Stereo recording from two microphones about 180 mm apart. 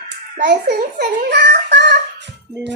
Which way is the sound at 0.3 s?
65° right (ahead or behind).